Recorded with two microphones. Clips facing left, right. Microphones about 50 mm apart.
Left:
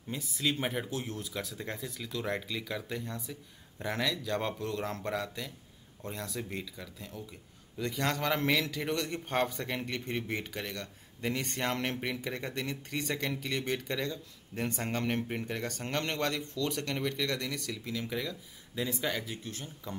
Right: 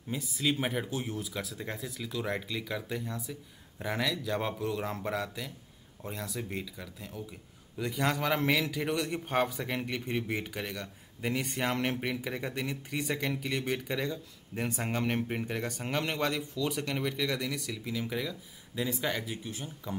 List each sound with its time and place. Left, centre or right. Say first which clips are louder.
0.1 s a man's voice: right 2 dB; centre